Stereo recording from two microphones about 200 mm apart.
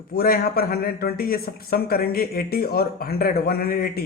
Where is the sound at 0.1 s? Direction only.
50° left (ahead or behind).